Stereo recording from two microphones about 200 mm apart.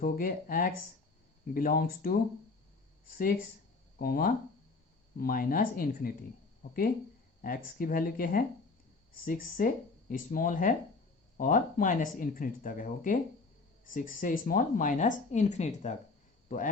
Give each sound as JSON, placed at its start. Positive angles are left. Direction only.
{"t": 0.0, "sound": "speech", "side_deg": 45}
{"t": 3.2, "sound": "speech", "side_deg": 45}